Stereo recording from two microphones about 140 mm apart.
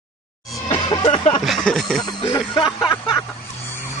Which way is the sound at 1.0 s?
40° left (ahead or behind).